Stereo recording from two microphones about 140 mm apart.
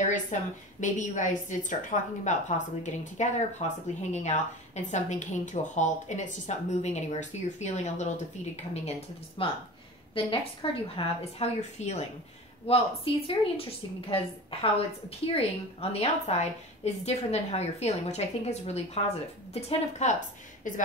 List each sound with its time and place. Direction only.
0.0 s a woman's voice: 60° left (ahead or behind)
9.4 s a woman's voice: 40° left (ahead or behind)
12.6 s a woman's voice: 40° left (ahead or behind)
20.7 s a woman's voice: 70° left (ahead or behind)